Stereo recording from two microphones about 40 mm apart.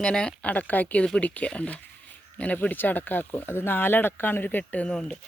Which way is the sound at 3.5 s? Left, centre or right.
Left.